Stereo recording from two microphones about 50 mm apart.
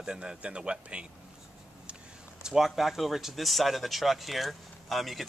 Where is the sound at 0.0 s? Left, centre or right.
Centre.